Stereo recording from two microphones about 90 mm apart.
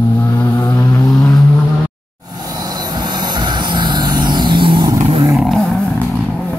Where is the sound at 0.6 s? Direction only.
40° left (ahead or behind).